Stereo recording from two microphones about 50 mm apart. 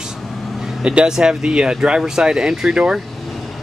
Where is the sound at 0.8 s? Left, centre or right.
Right.